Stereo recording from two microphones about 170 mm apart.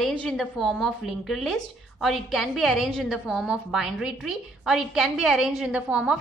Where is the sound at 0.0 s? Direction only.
5° left (ahead or behind).